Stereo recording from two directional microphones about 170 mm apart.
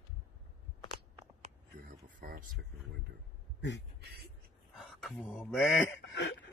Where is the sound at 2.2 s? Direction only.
55° right (ahead or behind).